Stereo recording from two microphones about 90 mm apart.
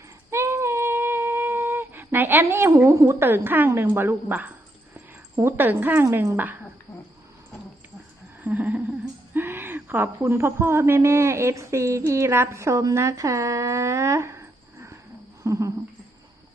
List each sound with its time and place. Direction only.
0.3 s a sound: 30° right (ahead or behind)
2.1 s a woman's voice: 25° right (ahead or behind)
8.4 s humming: 20° right (ahead or behind)
9.3 s speech: 25° right (ahead or behind)
15.4 s cricket: 35° right (ahead or behind)